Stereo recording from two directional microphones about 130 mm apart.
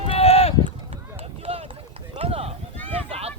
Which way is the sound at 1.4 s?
50° right (ahead or behind).